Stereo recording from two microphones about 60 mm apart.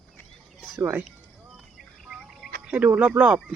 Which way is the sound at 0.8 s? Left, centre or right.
Right.